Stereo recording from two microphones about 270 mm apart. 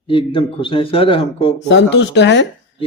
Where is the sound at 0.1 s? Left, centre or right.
Centre.